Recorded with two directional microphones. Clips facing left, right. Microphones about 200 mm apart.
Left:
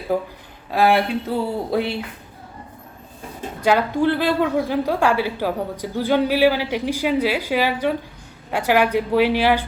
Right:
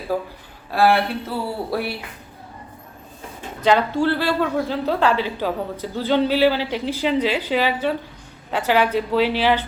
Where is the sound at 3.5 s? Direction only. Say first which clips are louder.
Even; 10° left (ahead or behind).